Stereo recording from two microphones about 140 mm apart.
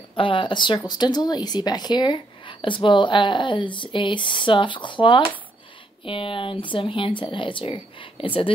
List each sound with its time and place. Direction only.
0.1 s speech: 35° left (ahead or behind)